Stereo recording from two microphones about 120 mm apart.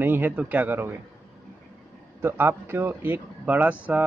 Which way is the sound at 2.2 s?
20° right (ahead or behind).